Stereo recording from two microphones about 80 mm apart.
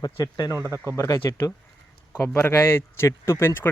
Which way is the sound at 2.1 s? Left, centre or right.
Left.